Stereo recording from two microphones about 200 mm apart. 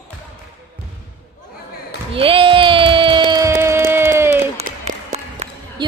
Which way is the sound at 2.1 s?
25° right (ahead or behind).